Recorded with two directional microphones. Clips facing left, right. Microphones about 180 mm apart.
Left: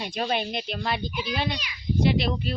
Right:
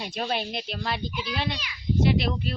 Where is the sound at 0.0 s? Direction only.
Centre (ahead or behind).